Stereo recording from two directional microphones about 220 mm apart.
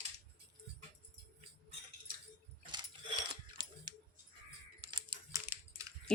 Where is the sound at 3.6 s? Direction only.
20° right (ahead or behind).